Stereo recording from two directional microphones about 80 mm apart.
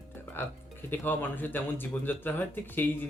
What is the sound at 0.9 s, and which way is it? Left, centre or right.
Speech, left.